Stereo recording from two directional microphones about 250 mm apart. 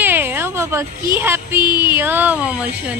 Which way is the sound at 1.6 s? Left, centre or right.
Centre.